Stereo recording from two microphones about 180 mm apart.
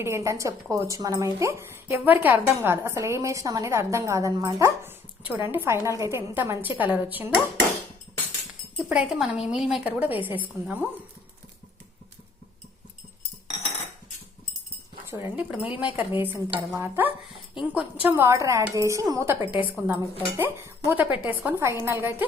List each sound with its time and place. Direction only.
0.0 s speech: 15° right (ahead or behind)
8.8 s a woman's voice: 5° right (ahead or behind)
15.1 s a woman's voice: 15° right (ahead or behind)